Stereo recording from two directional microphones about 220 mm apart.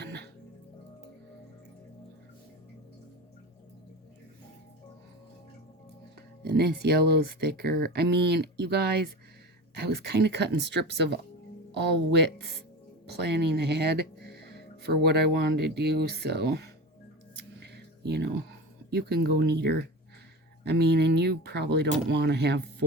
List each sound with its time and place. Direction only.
0.0 s music: 50° right (ahead or behind)
6.4 s speech: 50° right (ahead or behind)
17.6 s music: 50° right (ahead or behind)
18.9 s speech: 45° right (ahead or behind)